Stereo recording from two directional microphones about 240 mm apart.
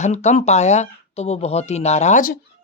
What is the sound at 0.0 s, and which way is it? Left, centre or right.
Speech, left.